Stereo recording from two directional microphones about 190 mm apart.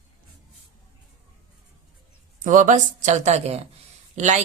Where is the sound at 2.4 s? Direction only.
45° right (ahead or behind).